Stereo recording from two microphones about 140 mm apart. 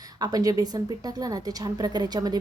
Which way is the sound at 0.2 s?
25° right (ahead or behind).